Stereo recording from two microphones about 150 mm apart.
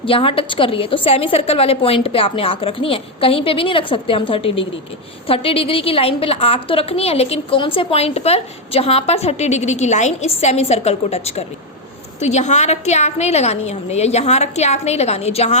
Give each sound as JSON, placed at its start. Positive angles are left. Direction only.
{"t": 0.0, "sound": "a woman's voice", "side_deg": 35}